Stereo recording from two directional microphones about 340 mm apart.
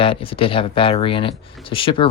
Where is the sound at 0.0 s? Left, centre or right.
Centre.